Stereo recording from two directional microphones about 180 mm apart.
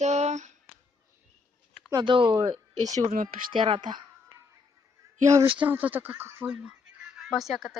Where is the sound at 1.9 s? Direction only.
25° right (ahead or behind).